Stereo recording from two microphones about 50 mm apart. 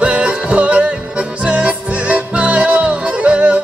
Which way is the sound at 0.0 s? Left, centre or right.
Right.